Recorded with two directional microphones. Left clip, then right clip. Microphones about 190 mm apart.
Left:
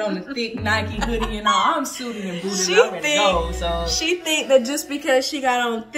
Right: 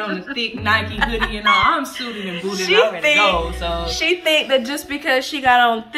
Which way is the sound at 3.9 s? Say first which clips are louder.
Right 8 dB; centre (ahead or behind).